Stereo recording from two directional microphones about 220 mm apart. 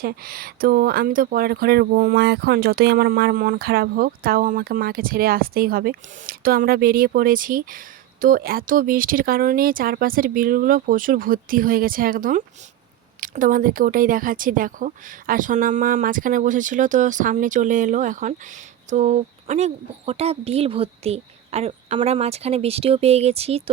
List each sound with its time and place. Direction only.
0.0 s a woman's voice: 40° right (ahead or behind)